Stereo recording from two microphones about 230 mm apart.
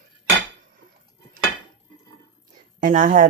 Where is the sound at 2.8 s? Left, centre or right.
Right.